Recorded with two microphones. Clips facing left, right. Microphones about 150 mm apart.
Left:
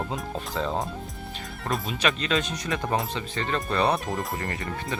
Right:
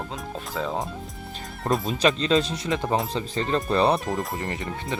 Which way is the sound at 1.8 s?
30° right (ahead or behind).